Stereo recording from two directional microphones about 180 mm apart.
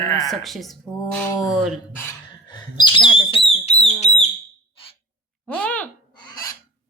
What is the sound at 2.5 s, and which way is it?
Speech, 25° left (ahead or behind).